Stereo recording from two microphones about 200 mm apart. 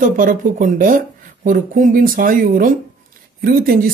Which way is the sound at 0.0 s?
40° right (ahead or behind).